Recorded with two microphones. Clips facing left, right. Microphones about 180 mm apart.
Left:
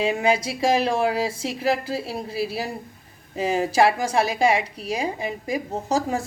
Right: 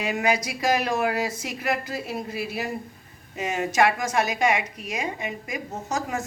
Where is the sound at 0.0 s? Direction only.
30° left (ahead or behind).